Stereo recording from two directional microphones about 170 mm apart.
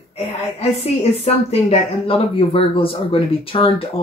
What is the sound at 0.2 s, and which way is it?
Speech, 35° left (ahead or behind).